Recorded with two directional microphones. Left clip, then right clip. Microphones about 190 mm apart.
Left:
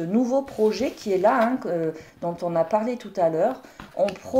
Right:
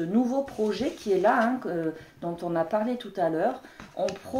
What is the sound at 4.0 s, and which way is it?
Speech, 20° left (ahead or behind).